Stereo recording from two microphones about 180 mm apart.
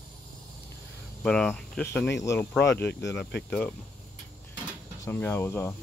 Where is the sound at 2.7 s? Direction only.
65° left (ahead or behind).